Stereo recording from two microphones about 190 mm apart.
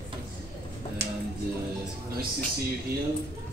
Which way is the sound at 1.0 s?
60° right (ahead or behind).